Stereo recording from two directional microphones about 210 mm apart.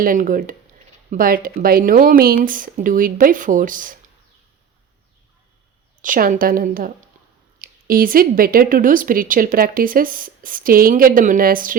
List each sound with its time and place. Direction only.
0.0 s speech: 40° right (ahead or behind)
6.0 s speech: 40° right (ahead or behind)